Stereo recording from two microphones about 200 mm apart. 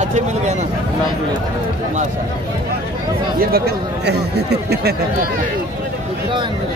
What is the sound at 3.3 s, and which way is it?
Speech, 50° right (ahead or behind).